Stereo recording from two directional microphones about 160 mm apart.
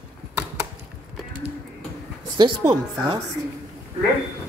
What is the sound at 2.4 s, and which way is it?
Speech, 25° right (ahead or behind).